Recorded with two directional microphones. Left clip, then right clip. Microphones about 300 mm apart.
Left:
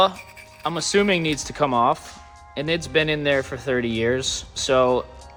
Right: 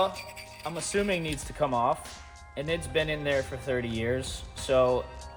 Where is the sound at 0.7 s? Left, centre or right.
Left.